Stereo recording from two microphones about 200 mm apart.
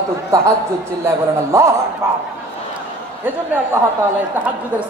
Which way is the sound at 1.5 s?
15° right (ahead or behind).